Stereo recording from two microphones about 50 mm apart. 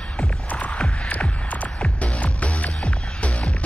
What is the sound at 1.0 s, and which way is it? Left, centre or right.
Music, left.